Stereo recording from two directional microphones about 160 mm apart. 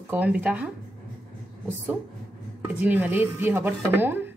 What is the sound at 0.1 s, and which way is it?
Speech, 10° right (ahead or behind).